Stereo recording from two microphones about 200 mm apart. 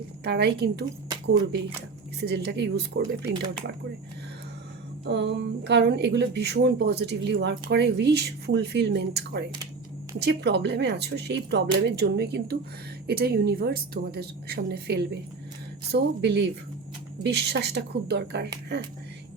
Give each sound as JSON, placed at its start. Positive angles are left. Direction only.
{"t": 0.3, "sound": "a woman's voice", "side_deg": -55}
{"t": 2.2, "sound": "a woman's voice", "side_deg": -55}
{"t": 5.0, "sound": "a woman's voice", "side_deg": -60}